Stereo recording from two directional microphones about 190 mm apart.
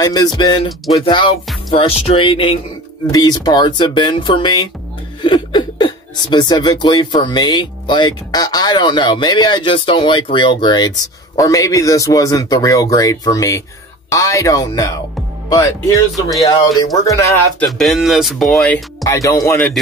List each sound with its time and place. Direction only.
0.0 s a man's voice: 20° left (ahead or behind)
16.4 s a man's voice: 15° left (ahead or behind)
17.6 s speech: centre (ahead or behind)
19.0 s a man's voice: 15° left (ahead or behind)